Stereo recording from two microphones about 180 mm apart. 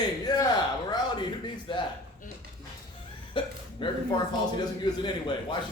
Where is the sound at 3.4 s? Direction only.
30° left (ahead or behind).